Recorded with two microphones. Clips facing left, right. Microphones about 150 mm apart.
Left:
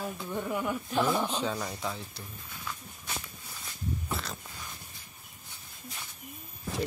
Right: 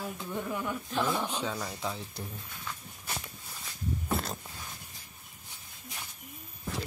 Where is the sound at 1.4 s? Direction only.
15° left (ahead or behind).